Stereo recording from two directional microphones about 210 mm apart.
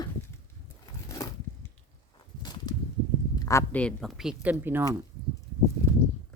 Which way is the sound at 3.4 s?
15° left (ahead or behind).